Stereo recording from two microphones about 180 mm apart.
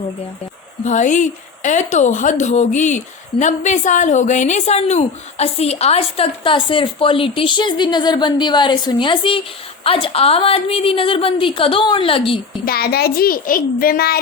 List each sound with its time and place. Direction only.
0.9 s speech: 40° left (ahead or behind)
12.6 s a child's voice: 60° left (ahead or behind)